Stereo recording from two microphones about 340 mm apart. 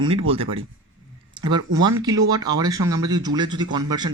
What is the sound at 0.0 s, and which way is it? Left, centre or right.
A man's voice, centre.